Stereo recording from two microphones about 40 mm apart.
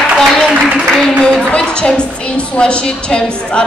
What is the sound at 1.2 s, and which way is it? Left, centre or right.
A woman's voice, left.